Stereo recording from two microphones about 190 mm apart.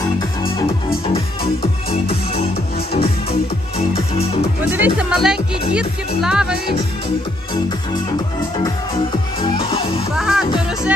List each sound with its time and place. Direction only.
4.7 s music: 10° right (ahead or behind)
9.4 s music: 25° left (ahead or behind)
10.2 s music: 5° right (ahead or behind)